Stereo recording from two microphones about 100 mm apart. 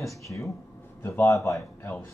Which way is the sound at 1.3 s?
30° left (ahead or behind).